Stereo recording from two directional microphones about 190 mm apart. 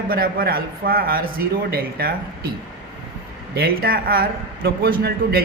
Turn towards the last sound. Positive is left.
turn(degrees=-55)  # may be behind; listen again after turning